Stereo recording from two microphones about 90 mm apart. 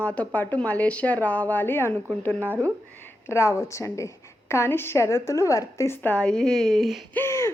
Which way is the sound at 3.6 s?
35° left (ahead or behind).